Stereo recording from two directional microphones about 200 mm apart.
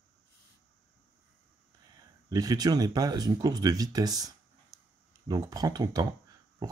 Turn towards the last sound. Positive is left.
turn(degrees=-20)  # may be behind; listen again after turning